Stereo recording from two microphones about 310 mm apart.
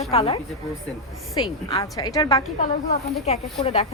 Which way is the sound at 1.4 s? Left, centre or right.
Centre.